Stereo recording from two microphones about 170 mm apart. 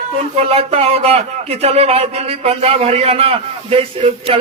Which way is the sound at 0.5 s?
35° right (ahead or behind).